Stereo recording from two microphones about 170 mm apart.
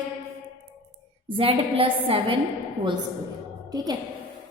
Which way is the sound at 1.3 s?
35° right (ahead or behind).